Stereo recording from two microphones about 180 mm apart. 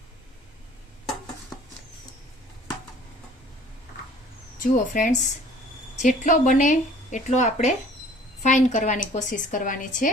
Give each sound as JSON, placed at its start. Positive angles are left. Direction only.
{"t": 4.6, "sound": "speech", "side_deg": 50}